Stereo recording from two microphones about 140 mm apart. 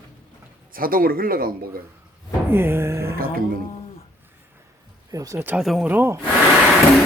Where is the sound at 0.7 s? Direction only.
90° right.